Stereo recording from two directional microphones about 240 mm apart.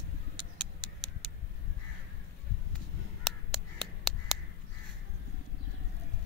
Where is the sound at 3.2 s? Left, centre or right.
Centre.